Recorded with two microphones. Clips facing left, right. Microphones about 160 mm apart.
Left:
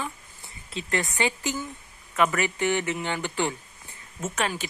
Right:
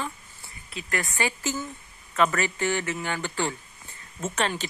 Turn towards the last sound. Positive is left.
turn(degrees=5)  # may be behind; listen again after turning